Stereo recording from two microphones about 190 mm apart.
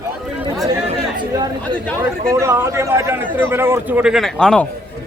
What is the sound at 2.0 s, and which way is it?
A man's voice, 15° right (ahead or behind).